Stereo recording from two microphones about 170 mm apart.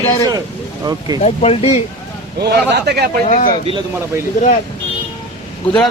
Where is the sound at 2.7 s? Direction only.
75° right (ahead or behind).